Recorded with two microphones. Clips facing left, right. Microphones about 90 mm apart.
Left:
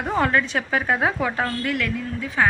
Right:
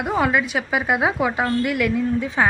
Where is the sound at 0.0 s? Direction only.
10° right (ahead or behind).